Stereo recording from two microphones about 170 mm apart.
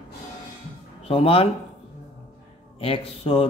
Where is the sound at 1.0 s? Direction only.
35° left (ahead or behind).